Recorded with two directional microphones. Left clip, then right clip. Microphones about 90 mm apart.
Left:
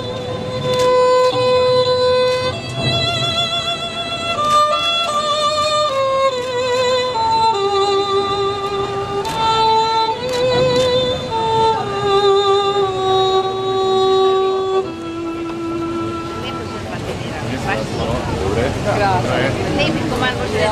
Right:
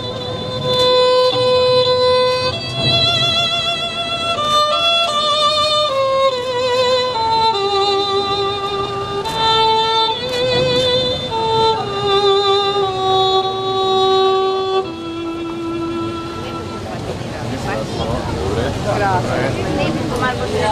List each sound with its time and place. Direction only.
0.8 s music: 15° right (ahead or behind)
18.5 s vehicle: centre (ahead or behind)
19.8 s a sound: 40° left (ahead or behind)